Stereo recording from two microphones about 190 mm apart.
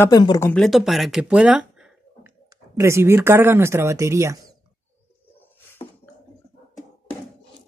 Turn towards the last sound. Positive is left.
turn(degrees=10)  # may be behind; listen again after turning